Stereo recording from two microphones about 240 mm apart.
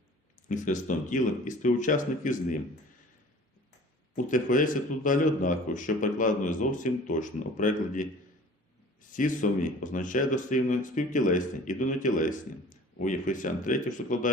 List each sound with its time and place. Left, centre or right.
0.4 s speech: left
4.1 s speech: left
9.1 s speech: left